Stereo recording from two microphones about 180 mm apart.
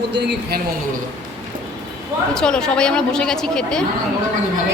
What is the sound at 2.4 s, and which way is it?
A woman's voice, 5° left (ahead or behind).